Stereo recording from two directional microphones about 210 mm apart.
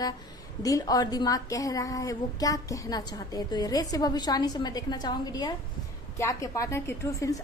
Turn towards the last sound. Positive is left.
turn(degrees=15)  # may be behind; listen again after turning